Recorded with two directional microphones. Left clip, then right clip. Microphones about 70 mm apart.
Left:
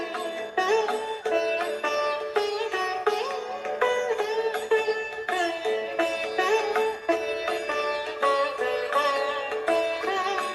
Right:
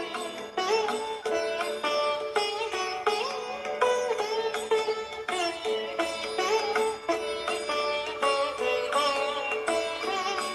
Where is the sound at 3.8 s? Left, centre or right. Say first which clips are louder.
Left 1 dB; left.